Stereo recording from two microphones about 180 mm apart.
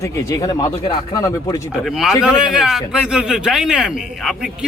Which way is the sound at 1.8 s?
Centre (ahead or behind).